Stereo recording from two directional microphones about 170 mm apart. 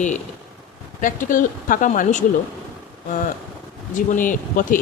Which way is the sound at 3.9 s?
50° left (ahead or behind).